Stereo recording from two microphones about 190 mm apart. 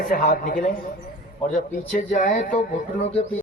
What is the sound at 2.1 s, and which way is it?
A man's voice, 45° left (ahead or behind).